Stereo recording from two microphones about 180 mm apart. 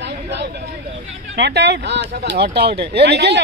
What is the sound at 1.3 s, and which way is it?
Speech, 70° right (ahead or behind).